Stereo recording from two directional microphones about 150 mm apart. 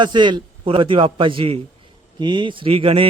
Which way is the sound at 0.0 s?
30° right (ahead or behind).